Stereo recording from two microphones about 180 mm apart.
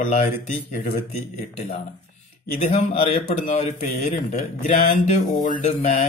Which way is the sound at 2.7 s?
35° left (ahead or behind).